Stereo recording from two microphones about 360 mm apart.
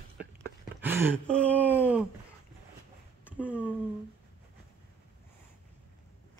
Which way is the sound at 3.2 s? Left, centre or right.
Centre.